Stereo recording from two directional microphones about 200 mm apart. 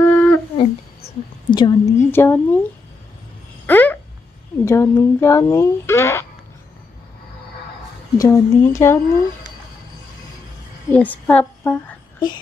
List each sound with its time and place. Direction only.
0.0 s humming: 5° left (ahead or behind)
0.6 s a sound: 25° left (ahead or behind); by 2.6 s 10° left (ahead or behind)
3.6 s a sound: 10° left (ahead or behind)
4.6 s speech: 15° left (ahead or behind)
8.2 s speech: 15° left (ahead or behind)
10.9 s speech: 10° left (ahead or behind)